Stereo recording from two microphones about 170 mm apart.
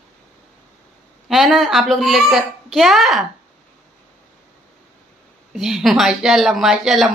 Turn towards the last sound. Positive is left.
turn(degrees=0)  # may be behind; listen again after turning